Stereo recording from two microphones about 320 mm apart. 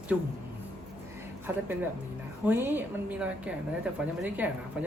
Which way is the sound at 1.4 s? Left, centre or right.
Centre.